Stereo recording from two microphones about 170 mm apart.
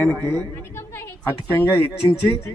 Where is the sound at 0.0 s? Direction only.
10° left (ahead or behind).